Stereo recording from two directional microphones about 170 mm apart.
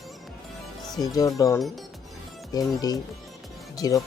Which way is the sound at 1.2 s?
20° left (ahead or behind).